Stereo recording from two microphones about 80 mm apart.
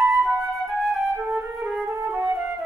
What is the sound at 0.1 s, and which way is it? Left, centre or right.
Flute, centre.